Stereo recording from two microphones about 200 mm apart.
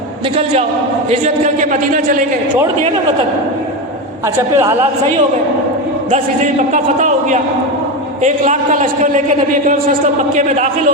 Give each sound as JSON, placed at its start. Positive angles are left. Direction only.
{"t": 1.1, "sound": "a man's voice", "side_deg": -35}
{"t": 4.4, "sound": "a woman's voice", "side_deg": -15}
{"t": 6.1, "sound": "a man's voice", "side_deg": -35}
{"t": 10.3, "sound": "a man's voice", "side_deg": -40}